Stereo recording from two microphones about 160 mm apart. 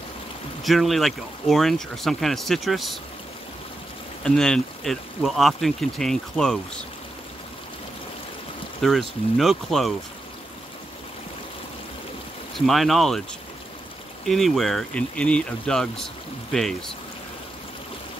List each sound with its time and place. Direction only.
0.7 s speech: centre (ahead or behind)
4.2 s speech: 5° left (ahead or behind)
8.8 s speech: centre (ahead or behind)
12.5 s speech: centre (ahead or behind)
14.2 s speech: centre (ahead or behind)